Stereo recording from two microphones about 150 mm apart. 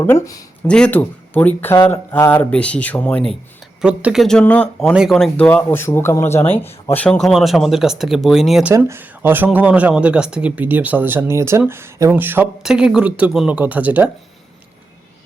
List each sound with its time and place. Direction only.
0.0 s speech: 15° left (ahead or behind)
3.8 s speech: 5° right (ahead or behind)
8.7 s speech: 15° right (ahead or behind)